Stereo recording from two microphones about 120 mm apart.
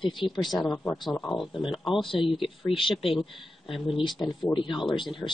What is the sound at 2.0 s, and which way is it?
Speech, 45° left (ahead or behind).